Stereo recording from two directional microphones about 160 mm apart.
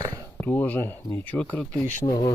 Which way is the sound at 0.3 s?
10° left (ahead or behind).